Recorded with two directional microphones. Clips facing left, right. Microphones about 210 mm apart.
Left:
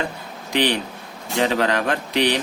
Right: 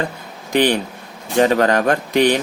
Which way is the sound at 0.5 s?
45° right (ahead or behind).